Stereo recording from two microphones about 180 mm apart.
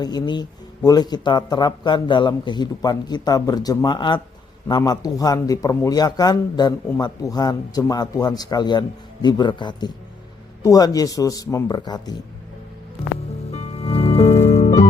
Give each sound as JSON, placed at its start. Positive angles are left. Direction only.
{"t": 0.0, "sound": "speech", "side_deg": 25}
{"t": 13.5, "sound": "music", "side_deg": 35}